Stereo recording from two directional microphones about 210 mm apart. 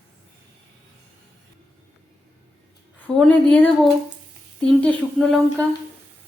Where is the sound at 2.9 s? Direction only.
5° left (ahead or behind).